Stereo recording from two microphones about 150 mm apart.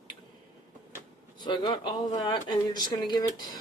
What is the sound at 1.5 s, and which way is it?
Speech, 30° left (ahead or behind).